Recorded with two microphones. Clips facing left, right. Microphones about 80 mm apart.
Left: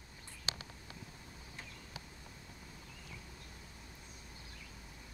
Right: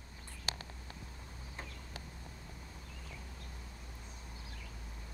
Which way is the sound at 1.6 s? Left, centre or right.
Right.